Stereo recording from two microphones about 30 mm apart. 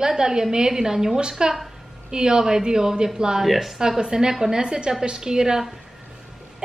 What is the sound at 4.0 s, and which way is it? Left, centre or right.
A woman's voice, right.